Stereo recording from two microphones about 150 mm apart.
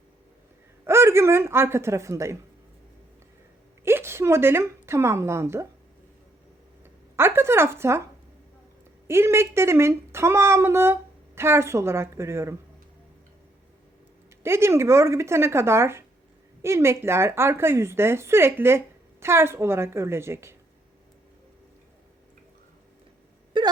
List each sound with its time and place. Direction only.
0.9 s speech: 15° right (ahead or behind)
3.8 s a woman's voice: 15° right (ahead or behind)
7.2 s a woman's voice: 15° right (ahead or behind)
9.0 s a woman's voice: 15° right (ahead or behind)
14.4 s a woman's voice: 15° right (ahead or behind)
23.5 s wail: 35° right (ahead or behind)